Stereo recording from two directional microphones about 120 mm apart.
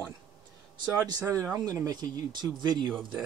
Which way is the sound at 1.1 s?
25° right (ahead or behind).